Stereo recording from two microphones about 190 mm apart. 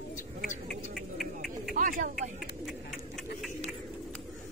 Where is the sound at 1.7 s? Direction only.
45° right (ahead or behind).